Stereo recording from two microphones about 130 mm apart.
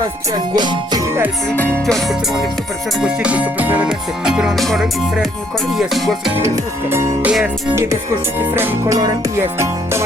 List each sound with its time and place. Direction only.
0.5 s music: 35° right (ahead or behind)
1.9 s music: centre (ahead or behind)
3.0 s music: 10° right (ahead or behind)
6.9 s music: 15° right (ahead or behind)
8.5 s music: 15° right (ahead or behind)